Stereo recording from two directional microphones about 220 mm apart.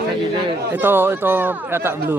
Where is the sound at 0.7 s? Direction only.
10° right (ahead or behind).